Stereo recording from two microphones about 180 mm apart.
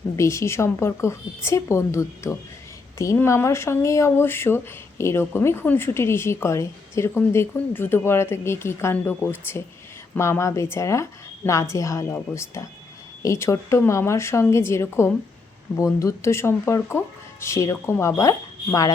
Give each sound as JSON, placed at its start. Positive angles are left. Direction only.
{"t": 0.2, "sound": "speech", "side_deg": 15}